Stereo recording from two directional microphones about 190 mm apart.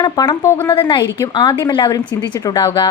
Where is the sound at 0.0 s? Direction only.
20° left (ahead or behind).